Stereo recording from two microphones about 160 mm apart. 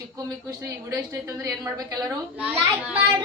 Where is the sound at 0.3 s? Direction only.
20° right (ahead or behind).